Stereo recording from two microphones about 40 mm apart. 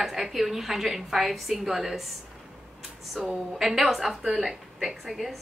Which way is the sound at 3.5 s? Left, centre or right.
Centre.